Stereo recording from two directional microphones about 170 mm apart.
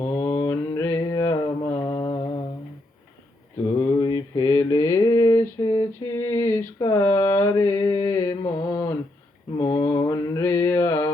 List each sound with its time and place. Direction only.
0.0 s mantra: 30° left (ahead or behind)
0.4 s mantra: 20° left (ahead or behind)
3.8 s mantra: 25° left (ahead or behind)
9.6 s a sound: 25° left (ahead or behind)
10.1 s mantra: 15° left (ahead or behind)